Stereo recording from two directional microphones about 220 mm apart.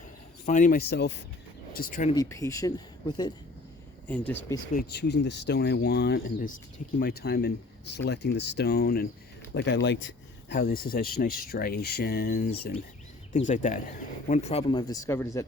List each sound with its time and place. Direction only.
0.4 s speech: 35° left (ahead or behind)
2.1 s speech: 15° left (ahead or behind)
4.1 s speech: 5° left (ahead or behind)
4.7 s speech: 45° left (ahead or behind); by 15.4 s 15° left (ahead or behind)